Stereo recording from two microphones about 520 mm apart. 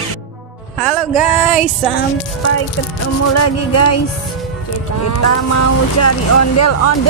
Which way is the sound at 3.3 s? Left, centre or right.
Left.